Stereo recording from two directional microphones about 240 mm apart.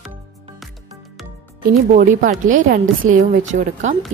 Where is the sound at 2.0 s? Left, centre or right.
Right.